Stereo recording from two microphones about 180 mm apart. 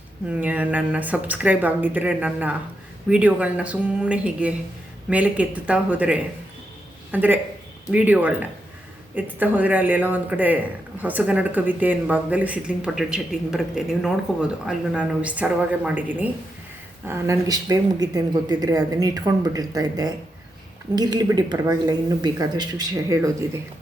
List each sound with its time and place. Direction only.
0.3 s a woman's voice: 10° right (ahead or behind)